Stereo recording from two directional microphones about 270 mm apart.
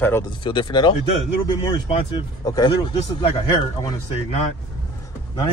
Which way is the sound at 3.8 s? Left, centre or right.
Left.